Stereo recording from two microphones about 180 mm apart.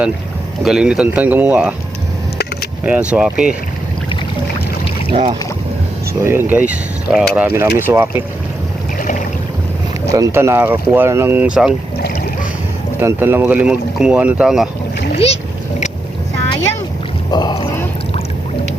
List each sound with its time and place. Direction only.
0.6 s speech: 5° right (ahead or behind)
2.8 s speech: 5° right (ahead or behind)
5.1 s speech: 30° right (ahead or behind)
6.2 s speech: 10° right (ahead or behind)
9.0 s boat: 45° left (ahead or behind)
10.1 s speech: 15° right (ahead or behind)
13.0 s speech: 15° right (ahead or behind)
15.1 s splash: 35° left (ahead or behind)
17.3 s speech: 25° left (ahead or behind)